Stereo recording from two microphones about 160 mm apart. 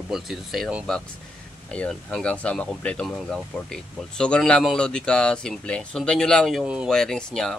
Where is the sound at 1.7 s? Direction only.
10° left (ahead or behind).